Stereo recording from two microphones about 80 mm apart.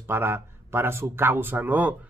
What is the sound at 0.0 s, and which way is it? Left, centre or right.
Speech, right.